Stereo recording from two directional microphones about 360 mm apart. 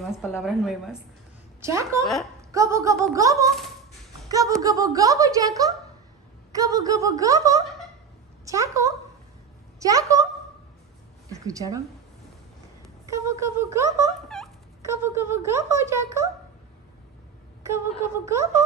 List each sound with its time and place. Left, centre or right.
0.2 s a woman's voice: centre
11.2 s a woman's voice: centre
12.8 s speech: centre
17.6 s a woman's voice: centre